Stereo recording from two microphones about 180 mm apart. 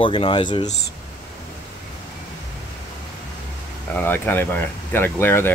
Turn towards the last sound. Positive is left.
turn(degrees=10)  # may be behind; listen again after turning